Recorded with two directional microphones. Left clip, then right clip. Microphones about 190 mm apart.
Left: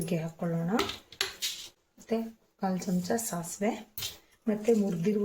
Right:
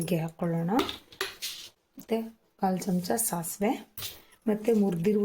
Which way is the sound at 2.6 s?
50° right (ahead or behind).